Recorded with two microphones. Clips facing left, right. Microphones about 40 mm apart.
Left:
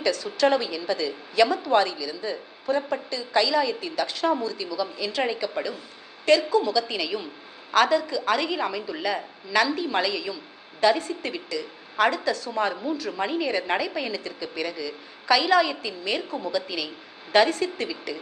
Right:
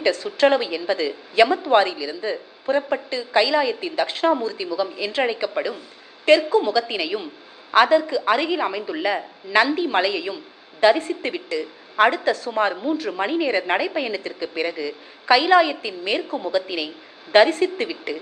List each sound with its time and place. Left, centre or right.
0.0 s a woman's voice: right